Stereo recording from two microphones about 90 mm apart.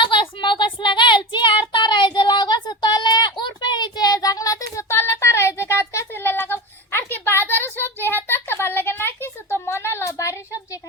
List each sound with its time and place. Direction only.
0.0 s child singing: 65° left (ahead or behind); by 10.8 s 35° left (ahead or behind)